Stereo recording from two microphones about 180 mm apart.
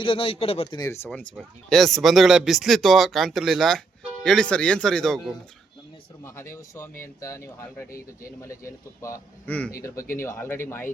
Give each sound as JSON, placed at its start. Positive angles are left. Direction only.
{"t": 0.0, "sound": "speech", "side_deg": 30}
{"t": 0.9, "sound": "a man's voice", "side_deg": 10}
{"t": 6.2, "sound": "speech", "side_deg": 15}